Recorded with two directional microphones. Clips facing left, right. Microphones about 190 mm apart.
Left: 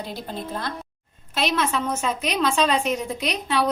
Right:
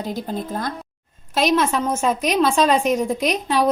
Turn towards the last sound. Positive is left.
turn(degrees=-45)  # may be behind; listen again after turning